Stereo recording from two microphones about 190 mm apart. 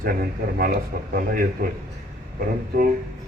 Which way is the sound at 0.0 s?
50° right (ahead or behind).